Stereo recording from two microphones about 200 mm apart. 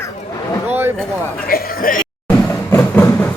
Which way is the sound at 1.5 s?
45° left (ahead or behind).